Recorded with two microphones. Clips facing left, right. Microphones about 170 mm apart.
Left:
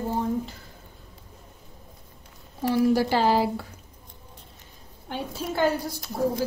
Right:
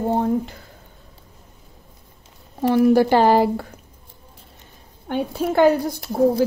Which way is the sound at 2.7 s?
55° right (ahead or behind).